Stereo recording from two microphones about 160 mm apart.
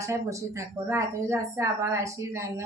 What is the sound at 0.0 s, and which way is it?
A woman's voice, 20° right (ahead or behind).